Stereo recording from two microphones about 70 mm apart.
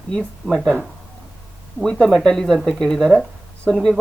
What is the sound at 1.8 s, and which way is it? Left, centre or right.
Speech, centre.